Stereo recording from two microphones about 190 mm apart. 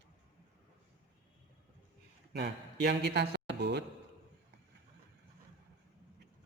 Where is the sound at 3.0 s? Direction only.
60° right (ahead or behind).